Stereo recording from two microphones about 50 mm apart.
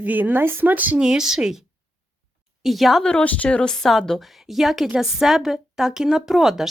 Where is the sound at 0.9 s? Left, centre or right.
Centre.